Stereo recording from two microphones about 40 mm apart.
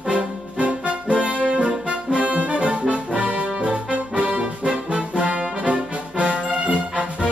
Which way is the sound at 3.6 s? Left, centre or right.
Right.